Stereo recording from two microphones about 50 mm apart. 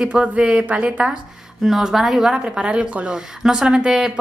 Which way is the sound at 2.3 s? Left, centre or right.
Centre.